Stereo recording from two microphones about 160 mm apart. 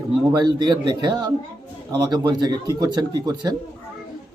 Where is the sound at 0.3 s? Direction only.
25° right (ahead or behind).